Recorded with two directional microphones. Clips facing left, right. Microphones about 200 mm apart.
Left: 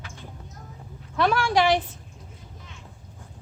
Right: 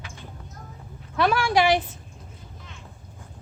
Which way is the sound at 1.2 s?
5° right (ahead or behind).